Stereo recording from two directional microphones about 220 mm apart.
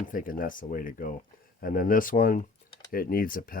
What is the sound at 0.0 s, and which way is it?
Speech, 40° left (ahead or behind).